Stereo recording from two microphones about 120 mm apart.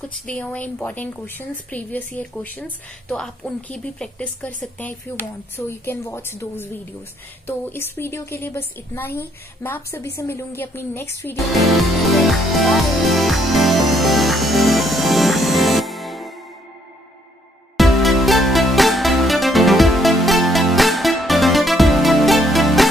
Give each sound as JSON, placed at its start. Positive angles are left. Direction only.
{"t": 0.3, "sound": "a woman's voice", "side_deg": 10}
{"t": 11.5, "sound": "music", "side_deg": 0}
{"t": 17.7, "sound": "music", "side_deg": 0}